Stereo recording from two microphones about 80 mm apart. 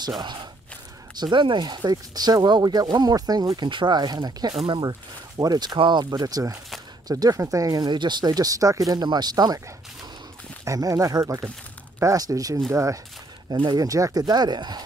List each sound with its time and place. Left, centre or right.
1.2 s speech: right
4.6 s speech: right
5.4 s speech: right
7.8 s speech: right
10.6 s speech: right
13.5 s speech: right
13.8 s speech: right